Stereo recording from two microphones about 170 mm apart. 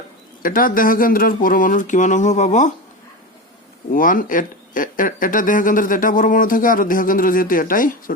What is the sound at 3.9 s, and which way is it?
Speech, 55° left (ahead or behind).